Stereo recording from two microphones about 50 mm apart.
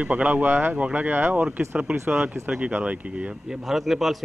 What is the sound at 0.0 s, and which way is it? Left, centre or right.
Speech, right.